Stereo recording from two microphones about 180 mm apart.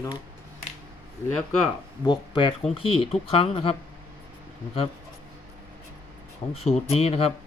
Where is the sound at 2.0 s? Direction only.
25° left (ahead or behind).